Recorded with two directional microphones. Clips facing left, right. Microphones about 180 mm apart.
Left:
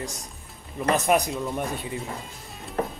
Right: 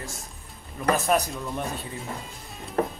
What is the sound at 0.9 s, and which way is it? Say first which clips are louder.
Speech: left 2 dB; 15° left (ahead or behind).